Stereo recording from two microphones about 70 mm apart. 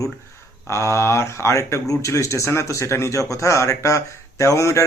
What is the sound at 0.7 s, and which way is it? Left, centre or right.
Speech, left.